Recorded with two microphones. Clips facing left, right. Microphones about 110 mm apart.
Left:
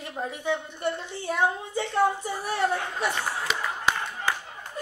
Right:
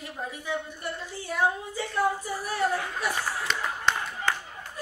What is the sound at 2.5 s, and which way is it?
Speech, 25° left (ahead or behind).